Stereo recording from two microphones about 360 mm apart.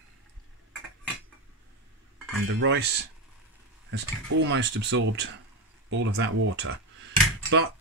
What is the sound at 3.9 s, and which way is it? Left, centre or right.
Speech, right.